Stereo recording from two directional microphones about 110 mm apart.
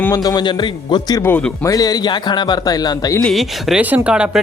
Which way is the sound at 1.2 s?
25° left (ahead or behind).